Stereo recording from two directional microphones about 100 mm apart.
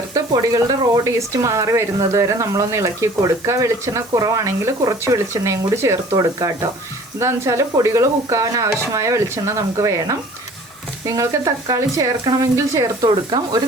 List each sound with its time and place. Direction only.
0.1 s speech: 35° right (ahead or behind)
11.2 s speech: 35° right (ahead or behind)